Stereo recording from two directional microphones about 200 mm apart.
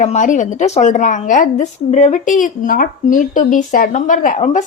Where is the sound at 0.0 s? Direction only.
40° left (ahead or behind).